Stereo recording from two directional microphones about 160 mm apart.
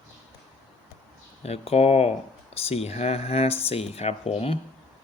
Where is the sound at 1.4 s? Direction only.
40° left (ahead or behind).